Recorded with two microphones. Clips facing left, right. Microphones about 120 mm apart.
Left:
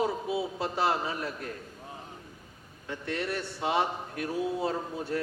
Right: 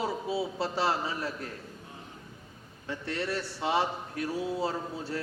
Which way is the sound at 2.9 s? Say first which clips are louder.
Even; 30° right (ahead or behind).